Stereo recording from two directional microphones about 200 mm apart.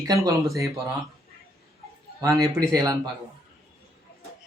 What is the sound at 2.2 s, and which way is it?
Speech, 20° right (ahead or behind).